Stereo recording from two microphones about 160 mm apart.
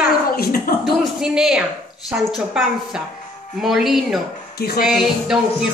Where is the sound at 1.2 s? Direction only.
5° right (ahead or behind).